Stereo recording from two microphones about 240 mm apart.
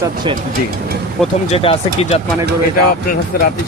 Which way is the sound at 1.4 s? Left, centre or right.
Left.